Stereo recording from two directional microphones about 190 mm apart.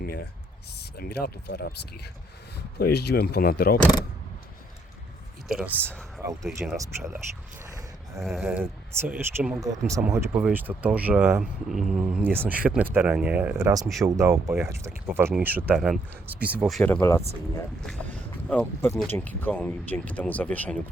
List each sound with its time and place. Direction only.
0.0 s a sound: 55° left (ahead or behind)
0.8 s speech: 55° left (ahead or behind)
5.5 s speech: 5° right (ahead or behind)
5.9 s speech: 5° left (ahead or behind)
6.7 s speech: 15° right (ahead or behind)
8.2 s speech: 5° right (ahead or behind); by 17.2 s 15° left (ahead or behind)
18.4 s speech: 10° left (ahead or behind)